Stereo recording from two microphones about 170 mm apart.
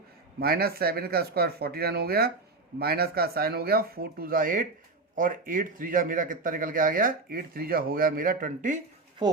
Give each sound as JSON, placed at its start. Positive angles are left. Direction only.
{"t": 0.3, "sound": "a man's voice", "side_deg": -65}
{"t": 9.2, "sound": "speech", "side_deg": -25}